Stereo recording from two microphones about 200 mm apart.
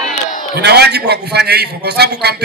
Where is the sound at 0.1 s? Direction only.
40° left (ahead or behind).